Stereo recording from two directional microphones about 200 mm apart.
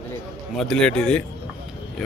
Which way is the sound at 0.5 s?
Centre (ahead or behind).